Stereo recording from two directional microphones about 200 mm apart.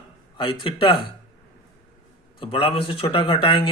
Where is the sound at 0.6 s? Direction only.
25° left (ahead or behind).